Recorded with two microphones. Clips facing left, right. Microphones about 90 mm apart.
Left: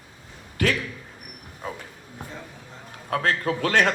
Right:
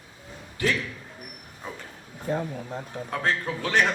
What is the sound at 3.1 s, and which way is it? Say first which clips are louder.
Speech: left 4 dB; 65° left (ahead or behind).